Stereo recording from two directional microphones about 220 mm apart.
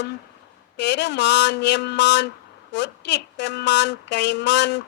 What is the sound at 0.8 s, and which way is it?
A woman's voice, 50° left (ahead or behind).